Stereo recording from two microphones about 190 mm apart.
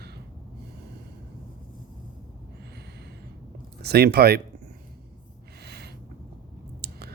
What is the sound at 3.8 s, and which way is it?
Speech, 55° right (ahead or behind).